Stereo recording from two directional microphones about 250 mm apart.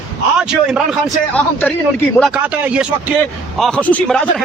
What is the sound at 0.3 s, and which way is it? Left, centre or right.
A man's voice, centre.